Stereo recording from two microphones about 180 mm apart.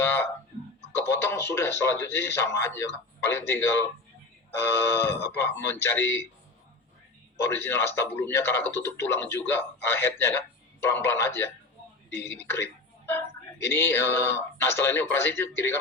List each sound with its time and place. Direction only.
0.0 s a sound: 10° left (ahead or behind)
0.9 s speech: 15° left (ahead or behind)
7.3 s speech: 15° left (ahead or behind)